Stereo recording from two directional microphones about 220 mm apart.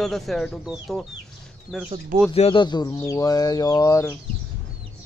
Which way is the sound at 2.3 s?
25° left (ahead or behind).